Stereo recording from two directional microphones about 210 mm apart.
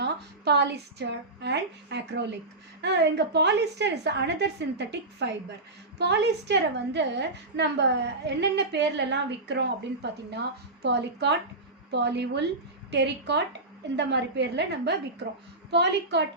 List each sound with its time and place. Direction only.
0.0 s a woman's voice: 50° right (ahead or behind)